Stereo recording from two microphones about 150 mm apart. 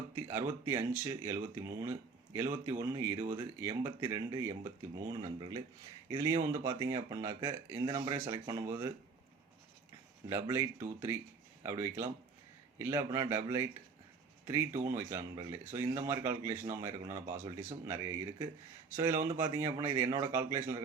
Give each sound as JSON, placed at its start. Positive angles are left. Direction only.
{"t": 0.2, "sound": "a sound", "side_deg": -25}
{"t": 0.6, "sound": "speech", "side_deg": -25}
{"t": 6.1, "sound": "speech", "side_deg": -25}
{"t": 10.5, "sound": "speech", "side_deg": -15}